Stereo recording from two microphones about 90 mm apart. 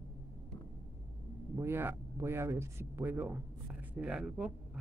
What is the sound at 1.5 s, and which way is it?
A woman's voice, 25° right (ahead or behind).